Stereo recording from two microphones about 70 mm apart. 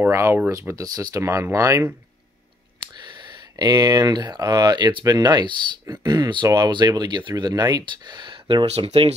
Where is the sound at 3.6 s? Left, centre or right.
Right.